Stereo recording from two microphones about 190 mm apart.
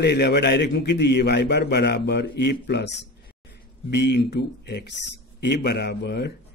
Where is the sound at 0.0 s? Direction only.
60° left (ahead or behind).